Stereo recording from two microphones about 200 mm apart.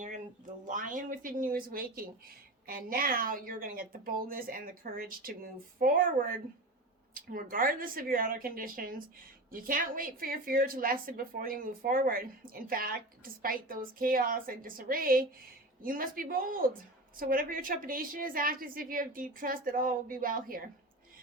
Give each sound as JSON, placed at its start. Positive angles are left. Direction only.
{"t": 0.7, "sound": "a woman's voice", "side_deg": -40}